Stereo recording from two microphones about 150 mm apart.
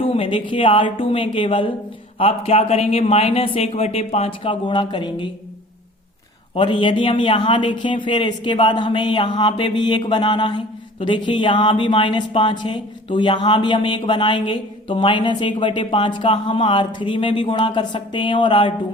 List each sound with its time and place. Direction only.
0.0 s speech: 35° left (ahead or behind)
6.5 s speech: 35° left (ahead or behind)